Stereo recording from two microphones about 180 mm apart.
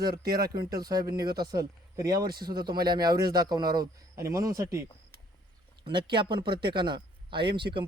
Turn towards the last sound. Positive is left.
turn(degrees=-25)  # may be behind; listen again after turning